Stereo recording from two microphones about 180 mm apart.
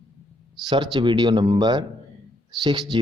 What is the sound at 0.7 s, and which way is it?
Speech, 25° right (ahead or behind).